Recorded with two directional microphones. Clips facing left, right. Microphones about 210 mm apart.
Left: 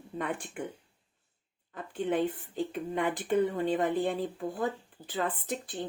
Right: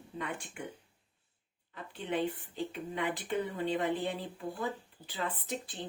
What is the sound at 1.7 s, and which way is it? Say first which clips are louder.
Speech: left 5 dB; 50° left (ahead or behind).